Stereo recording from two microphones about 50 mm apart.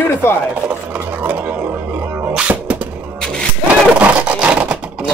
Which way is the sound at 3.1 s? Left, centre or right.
Centre.